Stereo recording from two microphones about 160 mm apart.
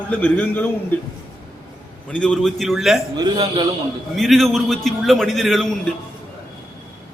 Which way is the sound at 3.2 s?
25° right (ahead or behind).